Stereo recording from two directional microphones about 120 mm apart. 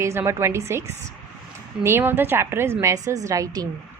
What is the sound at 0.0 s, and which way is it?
A woman's voice, 20° right (ahead or behind).